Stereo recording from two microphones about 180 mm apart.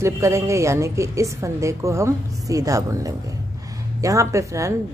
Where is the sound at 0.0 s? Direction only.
15° right (ahead or behind).